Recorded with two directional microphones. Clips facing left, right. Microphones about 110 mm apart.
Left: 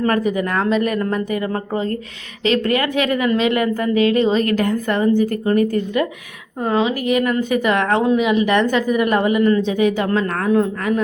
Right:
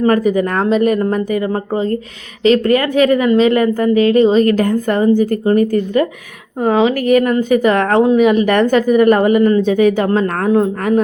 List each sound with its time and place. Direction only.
0.2 s a woman's voice: 40° right (ahead or behind)
0.9 s a woman's voice: 25° right (ahead or behind)
6.7 s speech: 60° right (ahead or behind)
7.1 s a woman's voice: 40° right (ahead or behind)